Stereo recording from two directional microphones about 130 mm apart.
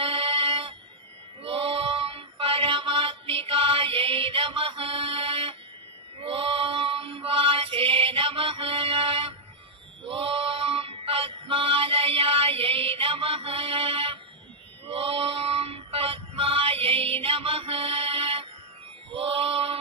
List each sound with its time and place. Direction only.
0.0 s a sound: 45° right (ahead or behind)
1.4 s synthetic singing: 45° right (ahead or behind)
6.1 s female singing: 45° right (ahead or behind)
10.0 s music: 45° right (ahead or behind)
14.9 s synthetic singing: 50° right (ahead or behind)
19.0 s a sound: 45° right (ahead or behind)